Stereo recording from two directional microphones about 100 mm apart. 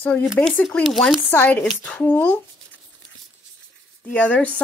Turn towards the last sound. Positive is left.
turn(degrees=15)  # may be behind; listen again after turning